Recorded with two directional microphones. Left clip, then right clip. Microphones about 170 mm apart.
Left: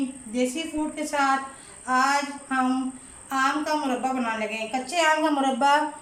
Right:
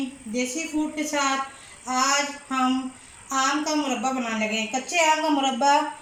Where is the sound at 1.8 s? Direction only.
25° right (ahead or behind).